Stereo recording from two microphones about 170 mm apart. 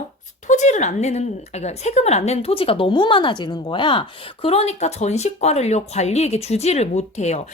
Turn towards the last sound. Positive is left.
turn(degrees=40)  # may be behind; listen again after turning